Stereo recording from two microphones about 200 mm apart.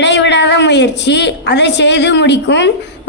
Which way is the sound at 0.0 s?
60° left (ahead or behind).